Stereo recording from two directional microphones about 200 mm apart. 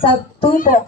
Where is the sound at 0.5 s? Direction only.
40° left (ahead or behind).